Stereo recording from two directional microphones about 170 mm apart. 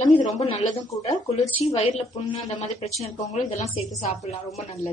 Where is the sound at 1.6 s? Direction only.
35° left (ahead or behind).